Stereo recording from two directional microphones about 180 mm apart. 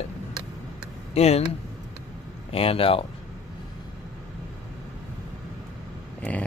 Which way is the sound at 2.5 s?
30° left (ahead or behind).